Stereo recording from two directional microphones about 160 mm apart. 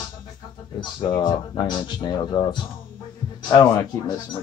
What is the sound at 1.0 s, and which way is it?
Speech, 30° left (ahead or behind).